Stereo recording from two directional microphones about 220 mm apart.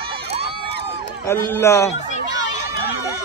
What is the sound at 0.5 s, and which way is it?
Crowd, 25° right (ahead or behind).